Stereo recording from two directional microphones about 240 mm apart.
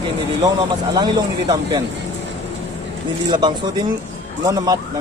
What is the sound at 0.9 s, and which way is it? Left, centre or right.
Speech, centre.